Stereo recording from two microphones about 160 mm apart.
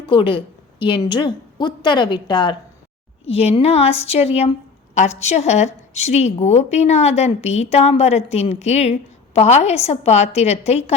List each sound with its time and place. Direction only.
0.1 s a woman's voice: 30° left (ahead or behind)